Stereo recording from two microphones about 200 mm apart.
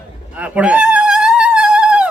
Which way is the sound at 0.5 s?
5° right (ahead or behind).